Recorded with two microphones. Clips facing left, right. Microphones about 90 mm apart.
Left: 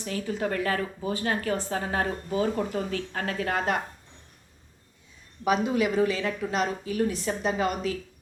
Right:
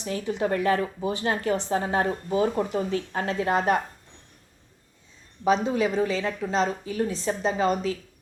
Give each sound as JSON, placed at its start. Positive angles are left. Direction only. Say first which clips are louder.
{"t": 0.0, "sound": "speech", "louder": "right 2 dB", "side_deg": -25}
{"t": 5.5, "sound": "speech", "louder": "right 2 dB", "side_deg": -30}